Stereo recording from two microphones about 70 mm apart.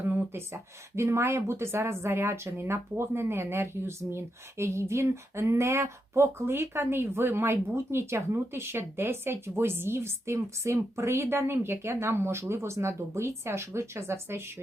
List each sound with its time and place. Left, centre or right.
0.2 s speech: right